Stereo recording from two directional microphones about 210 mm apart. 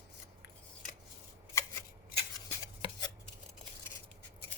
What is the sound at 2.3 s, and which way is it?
Chopping, 20° left (ahead or behind).